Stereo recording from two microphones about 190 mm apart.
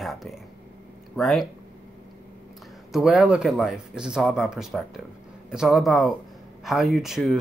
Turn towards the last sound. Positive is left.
turn(degrees=0)  # may be behind; listen again after turning